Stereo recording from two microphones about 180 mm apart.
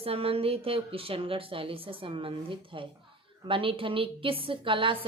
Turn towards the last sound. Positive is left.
turn(degrees=-30)  # may be behind; listen again after turning